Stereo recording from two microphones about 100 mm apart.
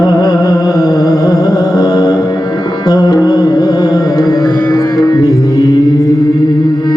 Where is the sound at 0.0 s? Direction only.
40° left (ahead or behind).